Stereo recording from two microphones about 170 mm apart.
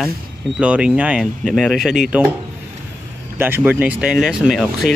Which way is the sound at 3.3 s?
10° right (ahead or behind).